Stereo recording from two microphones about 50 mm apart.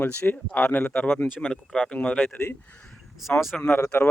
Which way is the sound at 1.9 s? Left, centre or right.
Left.